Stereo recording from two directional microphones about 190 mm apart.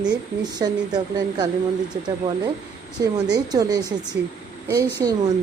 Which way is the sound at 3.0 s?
20° right (ahead or behind).